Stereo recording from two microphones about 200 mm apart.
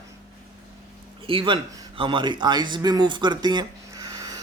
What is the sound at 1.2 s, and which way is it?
A man's voice, 25° right (ahead or behind).